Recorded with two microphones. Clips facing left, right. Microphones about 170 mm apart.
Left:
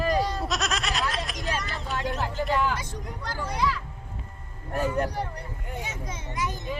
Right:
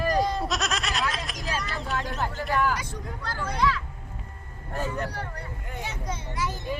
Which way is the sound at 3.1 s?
15° left (ahead or behind).